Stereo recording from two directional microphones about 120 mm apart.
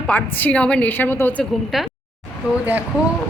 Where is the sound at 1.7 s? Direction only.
Centre (ahead or behind).